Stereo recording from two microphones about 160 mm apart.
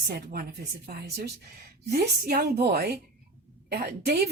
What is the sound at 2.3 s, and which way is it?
Speech, 70° right (ahead or behind).